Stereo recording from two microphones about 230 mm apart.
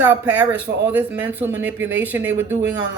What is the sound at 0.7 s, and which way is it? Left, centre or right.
Speech, right.